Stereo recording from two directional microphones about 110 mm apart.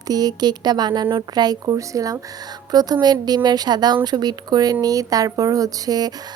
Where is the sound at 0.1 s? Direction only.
35° right (ahead or behind).